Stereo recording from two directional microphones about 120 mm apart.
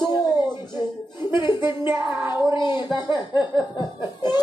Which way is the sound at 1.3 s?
40° left (ahead or behind).